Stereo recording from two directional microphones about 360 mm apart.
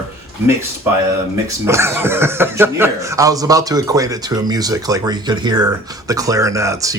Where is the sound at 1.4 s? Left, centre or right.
Centre.